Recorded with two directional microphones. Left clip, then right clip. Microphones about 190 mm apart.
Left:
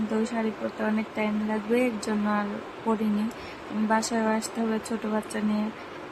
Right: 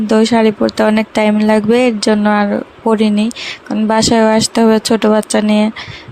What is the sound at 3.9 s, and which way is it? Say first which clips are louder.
Speech: right 15 dB; 50° right (ahead or behind).